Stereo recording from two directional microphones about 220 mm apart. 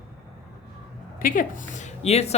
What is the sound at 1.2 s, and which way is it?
Speech, 40° left (ahead or behind).